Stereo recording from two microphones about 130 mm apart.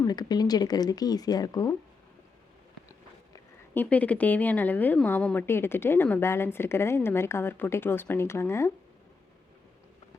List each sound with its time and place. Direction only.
0.0 s speech: 30° left (ahead or behind)
3.8 s a woman's voice: 10° left (ahead or behind)